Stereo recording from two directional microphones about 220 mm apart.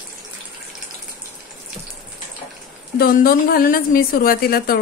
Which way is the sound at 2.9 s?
40° left (ahead or behind).